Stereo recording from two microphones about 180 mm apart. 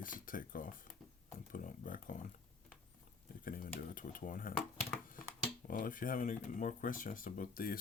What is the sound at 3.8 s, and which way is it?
Speech, 50° left (ahead or behind).